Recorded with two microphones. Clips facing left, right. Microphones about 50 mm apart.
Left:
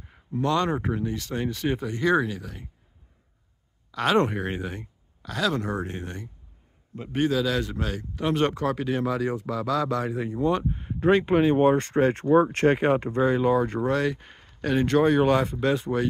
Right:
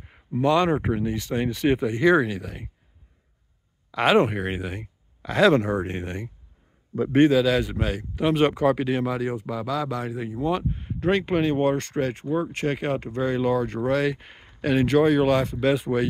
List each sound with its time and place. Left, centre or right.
0.0 s a sound: right
0.4 s speech: centre
3.9 s speech: centre
5.2 s speech: right
7.2 s speech: centre
11.0 s speech: centre
11.7 s speech: left
12.1 s speech: left
12.6 s speech: left
13.2 s speech: centre
13.8 s speech: centre
14.2 s speech: right
14.6 s speech: centre
15.6 s speech: centre